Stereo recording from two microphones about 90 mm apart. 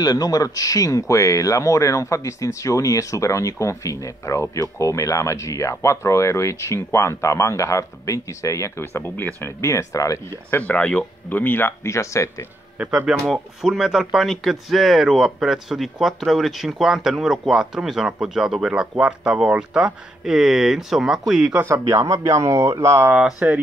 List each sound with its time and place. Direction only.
0.0 s speech: 45° left (ahead or behind)
10.5 s speech: 15° left (ahead or behind); by 12.4 s 35° left (ahead or behind)
12.7 s speech: 10° right (ahead or behind)
21.5 s speech: 30° right (ahead or behind)
23.4 s speech: 15° right (ahead or behind)